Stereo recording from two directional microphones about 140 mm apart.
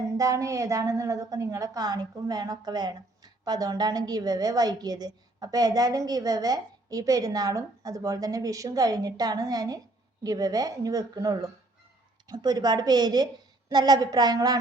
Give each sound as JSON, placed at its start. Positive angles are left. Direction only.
{"t": 0.2, "sound": "a woman's voice", "side_deg": -25}